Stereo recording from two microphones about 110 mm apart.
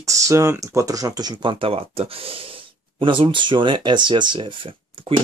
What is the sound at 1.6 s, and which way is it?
Speech, 60° right (ahead or behind).